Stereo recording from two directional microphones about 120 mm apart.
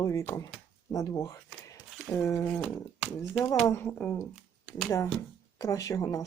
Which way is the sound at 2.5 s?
10° left (ahead or behind).